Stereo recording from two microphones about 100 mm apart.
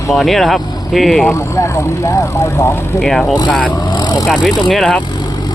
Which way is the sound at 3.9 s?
45° left (ahead or behind).